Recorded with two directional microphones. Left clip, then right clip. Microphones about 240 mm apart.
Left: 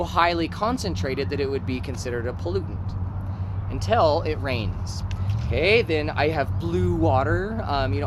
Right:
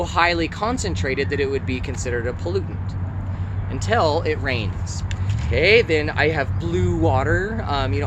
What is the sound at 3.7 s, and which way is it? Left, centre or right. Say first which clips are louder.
Speech: right 1 dB; centre.